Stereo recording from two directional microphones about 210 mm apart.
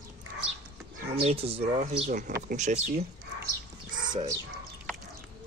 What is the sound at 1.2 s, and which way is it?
Speech, 30° right (ahead or behind).